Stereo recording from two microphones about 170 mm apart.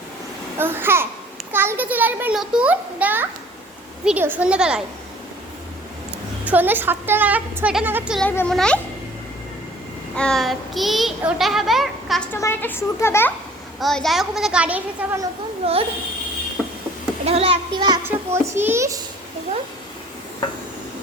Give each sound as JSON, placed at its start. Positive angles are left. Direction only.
{"t": 0.6, "sound": "a woman's voice", "side_deg": -15}
{"t": 6.4, "sound": "a woman's voice", "side_deg": -10}
{"t": 8.2, "sound": "a child's voice", "side_deg": 10}
{"t": 10.2, "sound": "a child's voice", "side_deg": 5}
{"t": 12.3, "sound": "speech", "side_deg": 15}
{"t": 13.7, "sound": "a child's voice", "side_deg": 0}
{"t": 15.6, "sound": "a child's voice", "side_deg": -35}
{"t": 16.6, "sound": "a sound", "side_deg": 0}
{"t": 17.2, "sound": "a child's voice", "side_deg": -35}
{"t": 18.0, "sound": "a woman's voice", "side_deg": -15}